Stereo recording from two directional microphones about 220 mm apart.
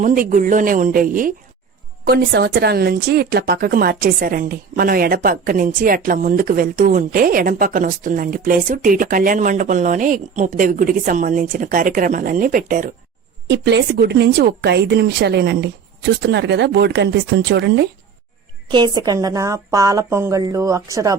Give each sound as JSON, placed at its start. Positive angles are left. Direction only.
{"t": 0.0, "sound": "speech", "side_deg": -35}
{"t": 13.5, "sound": "a woman's voice", "side_deg": -50}
{"t": 18.7, "sound": "a woman's voice", "side_deg": -20}